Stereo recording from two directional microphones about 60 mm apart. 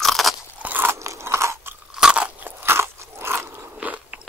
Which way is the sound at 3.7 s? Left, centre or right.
Right.